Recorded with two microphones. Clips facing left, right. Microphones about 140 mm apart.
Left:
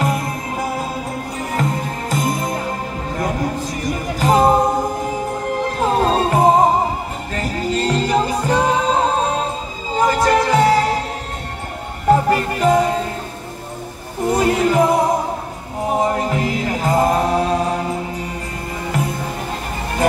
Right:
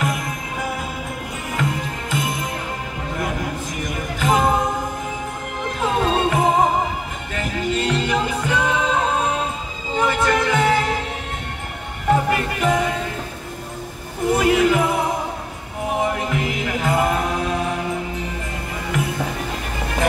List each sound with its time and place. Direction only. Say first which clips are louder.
0.0 s music: left 4 dB; 35° left (ahead or behind)
3.8 s music: left 4 dB; 35° left (ahead or behind)
5.7 s music: left 2 dB; 40° left (ahead or behind)
12.1 s music: left 4 dB; 35° left (ahead or behind)
14.2 s music: even; 35° left (ahead or behind)